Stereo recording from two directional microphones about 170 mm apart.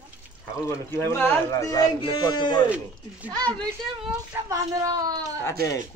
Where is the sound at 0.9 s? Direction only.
15° left (ahead or behind).